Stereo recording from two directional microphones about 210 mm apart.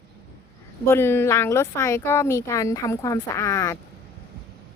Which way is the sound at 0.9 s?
10° left (ahead or behind).